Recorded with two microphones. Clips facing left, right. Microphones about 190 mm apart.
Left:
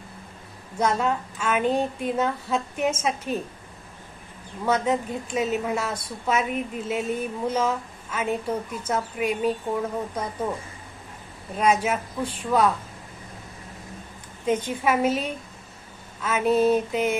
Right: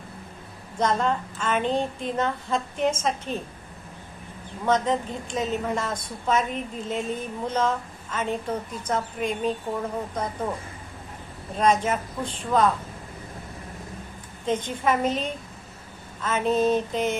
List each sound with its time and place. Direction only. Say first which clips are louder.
0.8 s a woman's voice: even; 10° left (ahead or behind)
4.6 s a woman's voice: even; 10° left (ahead or behind)
11.5 s a woman's voice: even; 10° left (ahead or behind)
14.4 s a woman's voice: left 1 dB; 10° left (ahead or behind)